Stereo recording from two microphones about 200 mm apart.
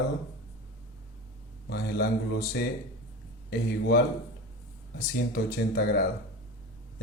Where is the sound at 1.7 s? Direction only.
55° left (ahead or behind).